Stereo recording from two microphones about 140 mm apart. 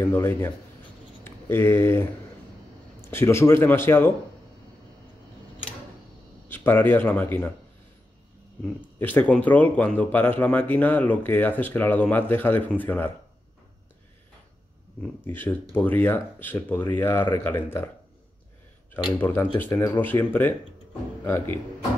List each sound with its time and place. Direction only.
0.0 s speech: 15° left (ahead or behind)
6.5 s speech: 15° left (ahead or behind)
9.0 s speech: 10° left (ahead or behind)
15.0 s speech: 15° left (ahead or behind)
19.1 s speech: 15° left (ahead or behind)